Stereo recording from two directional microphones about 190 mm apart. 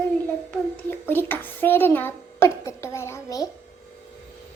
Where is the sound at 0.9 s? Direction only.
10° left (ahead or behind).